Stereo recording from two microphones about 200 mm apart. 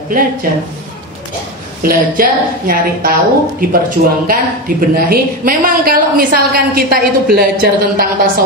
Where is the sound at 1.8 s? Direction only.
45° right (ahead or behind).